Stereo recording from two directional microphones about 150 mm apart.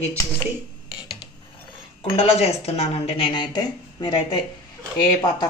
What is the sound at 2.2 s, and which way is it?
Speech, 45° left (ahead or behind).